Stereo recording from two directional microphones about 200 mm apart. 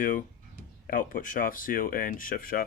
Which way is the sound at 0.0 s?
40° left (ahead or behind).